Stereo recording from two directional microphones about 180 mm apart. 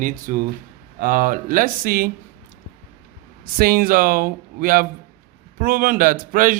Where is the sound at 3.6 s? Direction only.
55° right (ahead or behind).